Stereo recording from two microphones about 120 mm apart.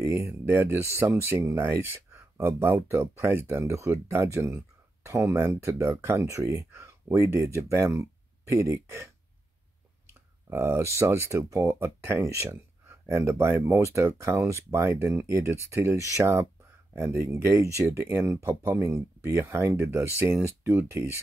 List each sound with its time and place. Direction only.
0.0 s speech: 20° right (ahead or behind)
10.5 s speech: 20° right (ahead or behind)